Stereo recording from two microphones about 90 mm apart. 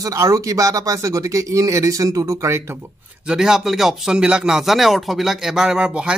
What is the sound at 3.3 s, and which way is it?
Speech, 5° right (ahead or behind).